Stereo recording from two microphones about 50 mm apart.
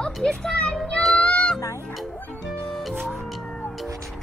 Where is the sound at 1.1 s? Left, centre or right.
Left.